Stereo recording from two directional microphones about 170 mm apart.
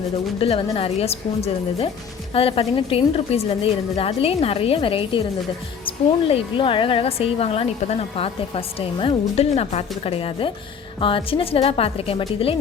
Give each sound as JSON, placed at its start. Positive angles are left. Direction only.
{"t": 0.3, "sound": "a woman's voice", "side_deg": 35}